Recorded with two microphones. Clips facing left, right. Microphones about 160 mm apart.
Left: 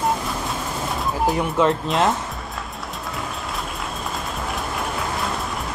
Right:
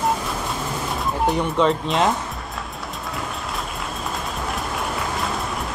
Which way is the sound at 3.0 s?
Centre (ahead or behind).